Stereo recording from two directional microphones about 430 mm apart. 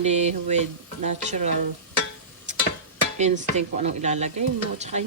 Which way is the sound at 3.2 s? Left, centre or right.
Centre.